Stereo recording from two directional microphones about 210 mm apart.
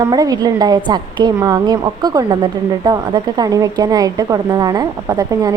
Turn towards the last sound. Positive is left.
turn(degrees=-15)  # may be behind; listen again after turning